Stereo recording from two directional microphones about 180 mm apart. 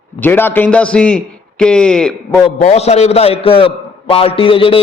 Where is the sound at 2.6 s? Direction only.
35° left (ahead or behind).